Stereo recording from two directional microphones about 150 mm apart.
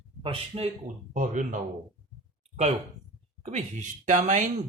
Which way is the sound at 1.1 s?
60° right (ahead or behind).